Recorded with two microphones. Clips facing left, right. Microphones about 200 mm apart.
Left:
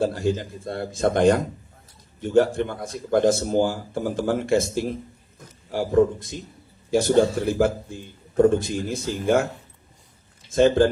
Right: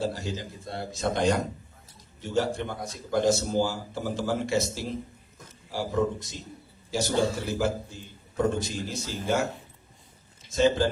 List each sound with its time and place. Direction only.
0.0 s a man's voice: 55° left (ahead or behind)
10.5 s a man's voice: 55° left (ahead or behind)